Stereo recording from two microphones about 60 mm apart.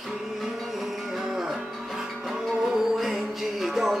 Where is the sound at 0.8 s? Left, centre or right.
Centre.